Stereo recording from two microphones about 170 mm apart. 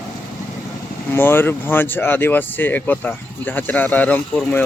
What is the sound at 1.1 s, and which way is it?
Speech, 15° left (ahead or behind).